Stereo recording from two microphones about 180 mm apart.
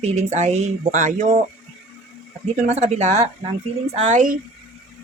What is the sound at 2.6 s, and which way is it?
Speech, 35° right (ahead or behind).